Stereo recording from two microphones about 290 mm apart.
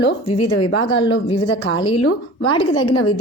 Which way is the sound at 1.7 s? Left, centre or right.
Centre.